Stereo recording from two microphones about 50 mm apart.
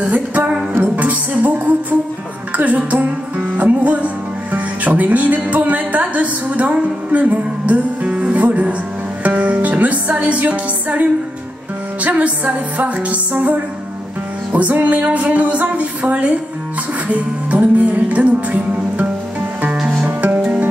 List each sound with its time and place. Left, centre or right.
0.0 s music: right
2.5 s speech: right
9.2 s music: right